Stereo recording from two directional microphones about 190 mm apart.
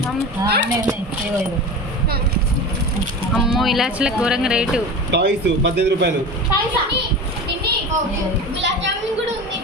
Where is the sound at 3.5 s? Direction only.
Centre (ahead or behind).